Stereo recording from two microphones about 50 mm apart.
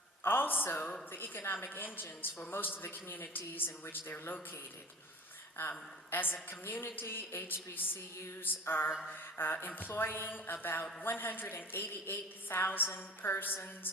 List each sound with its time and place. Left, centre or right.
0.2 s a woman's voice: left
5.5 s a woman's voice: left
8.9 s mantra: centre
9.4 s a woman's voice: left